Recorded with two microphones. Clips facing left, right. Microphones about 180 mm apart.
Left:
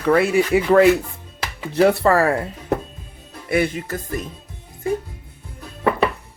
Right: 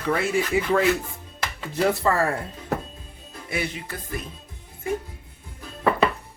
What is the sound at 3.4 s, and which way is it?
Music, 55° left (ahead or behind).